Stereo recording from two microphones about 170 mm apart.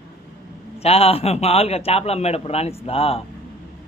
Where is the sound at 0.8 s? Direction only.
35° left (ahead or behind).